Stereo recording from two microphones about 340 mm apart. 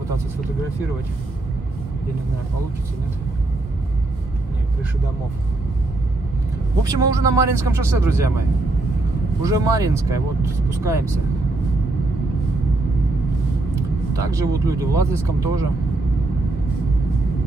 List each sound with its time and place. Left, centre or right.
6.8 s speech: centre
9.4 s speech: centre
13.7 s speech: centre